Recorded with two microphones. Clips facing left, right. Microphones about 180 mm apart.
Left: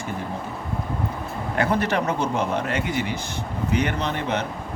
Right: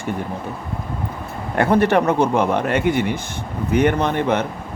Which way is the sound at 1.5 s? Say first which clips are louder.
Right 7 dB; 55° right (ahead or behind).